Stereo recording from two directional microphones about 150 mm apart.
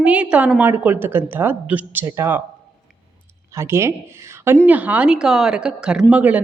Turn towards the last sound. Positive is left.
turn(degrees=-10)  # may be behind; listen again after turning